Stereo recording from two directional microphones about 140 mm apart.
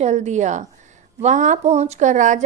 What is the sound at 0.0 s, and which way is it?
A woman's voice, 55° right (ahead or behind).